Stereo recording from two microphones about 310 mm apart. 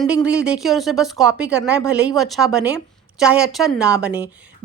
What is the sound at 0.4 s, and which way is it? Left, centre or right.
Speech, centre.